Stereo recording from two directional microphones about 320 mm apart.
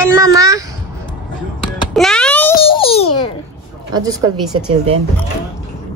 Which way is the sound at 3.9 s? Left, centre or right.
Centre.